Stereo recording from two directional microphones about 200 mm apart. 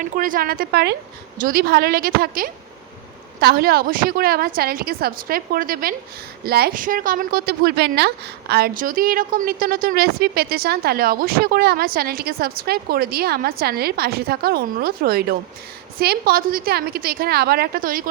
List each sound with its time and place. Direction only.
0.0 s a woman's voice: 45° right (ahead or behind)